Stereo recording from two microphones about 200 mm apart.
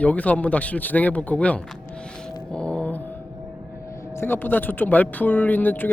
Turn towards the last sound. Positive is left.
turn(degrees=10)  # may be behind; listen again after turning